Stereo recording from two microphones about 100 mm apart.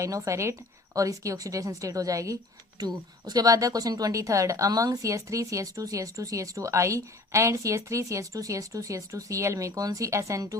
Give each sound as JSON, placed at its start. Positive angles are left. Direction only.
{"t": 0.0, "sound": "a woman's voice", "side_deg": -30}